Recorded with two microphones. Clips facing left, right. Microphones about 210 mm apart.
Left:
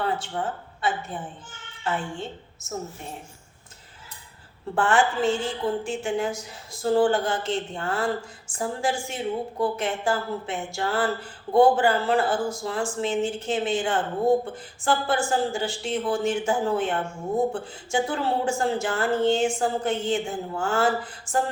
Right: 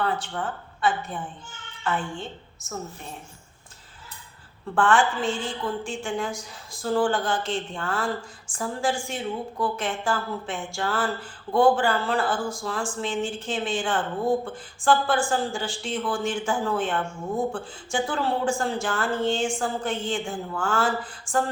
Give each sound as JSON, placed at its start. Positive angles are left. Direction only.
{"t": 0.0, "sound": "a woman's voice", "side_deg": 25}
{"t": 2.6, "sound": "speech", "side_deg": 25}
{"t": 4.7, "sound": "speech", "side_deg": 25}